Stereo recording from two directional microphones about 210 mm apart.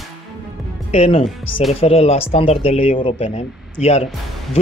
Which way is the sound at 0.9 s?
30° left (ahead or behind).